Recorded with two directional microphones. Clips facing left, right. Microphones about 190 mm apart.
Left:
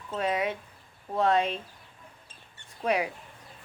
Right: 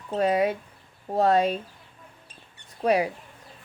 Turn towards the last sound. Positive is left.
turn(degrees=-35)  # may be behind; listen again after turning